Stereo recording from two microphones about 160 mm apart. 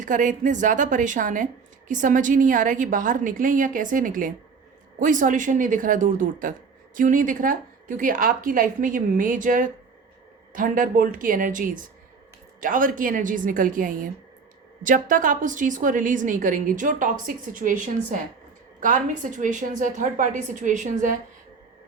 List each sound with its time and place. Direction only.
0.0 s a woman's voice: 55° right (ahead or behind)